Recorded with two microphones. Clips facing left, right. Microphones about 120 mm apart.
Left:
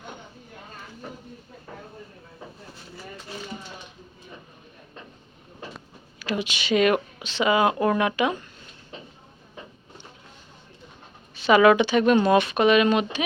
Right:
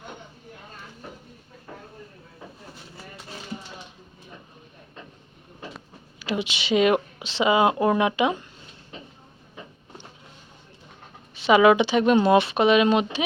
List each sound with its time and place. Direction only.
6.1 s speech: 25° right (ahead or behind)
11.4 s speech: 15° right (ahead or behind)